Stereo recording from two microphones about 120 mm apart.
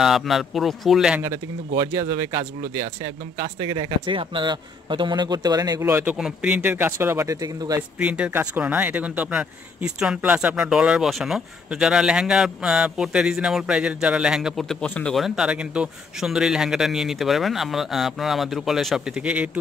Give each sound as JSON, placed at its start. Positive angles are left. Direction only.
{"t": 0.0, "sound": "speech", "side_deg": 0}
{"t": 1.2, "sound": "a man's voice", "side_deg": -30}
{"t": 6.1, "sound": "speech", "side_deg": -5}